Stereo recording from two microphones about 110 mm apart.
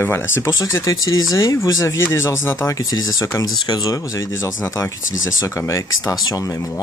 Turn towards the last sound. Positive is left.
turn(degrees=30)  # may be behind; listen again after turning